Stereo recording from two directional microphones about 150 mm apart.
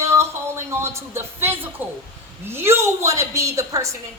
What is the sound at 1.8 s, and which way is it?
A woman's voice, 10° right (ahead or behind).